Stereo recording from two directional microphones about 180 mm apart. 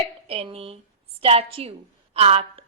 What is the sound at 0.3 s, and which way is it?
A woman's voice, 30° right (ahead or behind).